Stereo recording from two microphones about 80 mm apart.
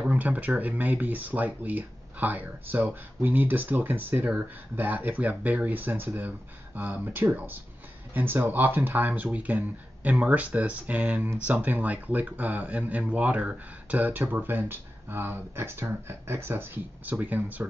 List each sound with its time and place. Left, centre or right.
0.0 s speech: centre